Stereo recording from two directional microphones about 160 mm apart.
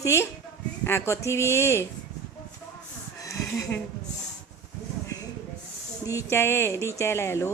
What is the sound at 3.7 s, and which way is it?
Speech, 15° left (ahead or behind).